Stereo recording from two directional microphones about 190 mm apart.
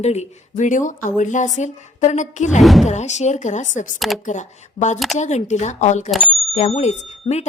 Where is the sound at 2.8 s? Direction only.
40° left (ahead or behind).